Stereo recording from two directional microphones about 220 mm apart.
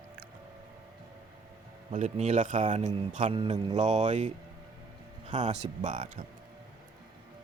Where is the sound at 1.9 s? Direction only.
30° right (ahead or behind).